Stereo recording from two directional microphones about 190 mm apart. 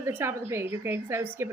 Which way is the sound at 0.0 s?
10° right (ahead or behind).